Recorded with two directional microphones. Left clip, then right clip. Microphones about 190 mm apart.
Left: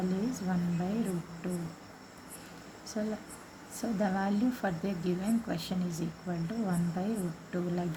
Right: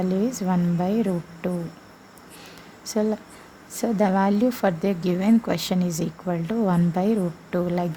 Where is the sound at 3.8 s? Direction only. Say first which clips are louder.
Right 11 dB; 45° right (ahead or behind).